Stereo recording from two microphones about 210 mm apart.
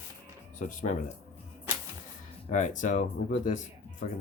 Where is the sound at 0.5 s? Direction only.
35° left (ahead or behind).